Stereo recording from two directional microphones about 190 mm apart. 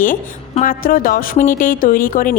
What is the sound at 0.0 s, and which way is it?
A woman's voice, 45° left (ahead or behind).